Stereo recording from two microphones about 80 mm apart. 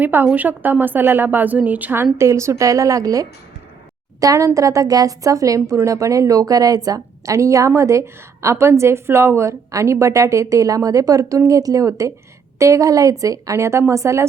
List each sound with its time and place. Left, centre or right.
0.0 s a woman's voice: right
2.1 s a woman's voice: right